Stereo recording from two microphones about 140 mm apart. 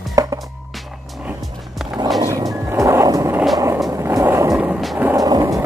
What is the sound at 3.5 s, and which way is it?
Vehicle, 20° right (ahead or behind).